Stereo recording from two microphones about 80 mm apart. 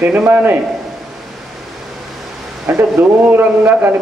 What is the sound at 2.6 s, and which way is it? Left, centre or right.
A man's voice, right.